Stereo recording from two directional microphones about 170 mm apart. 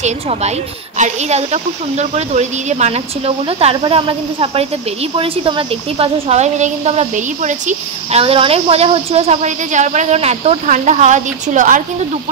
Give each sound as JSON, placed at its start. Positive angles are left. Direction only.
{"t": 0.0, "sound": "speech", "side_deg": -40}